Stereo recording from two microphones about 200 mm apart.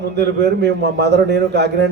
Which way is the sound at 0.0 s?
55° right (ahead or behind).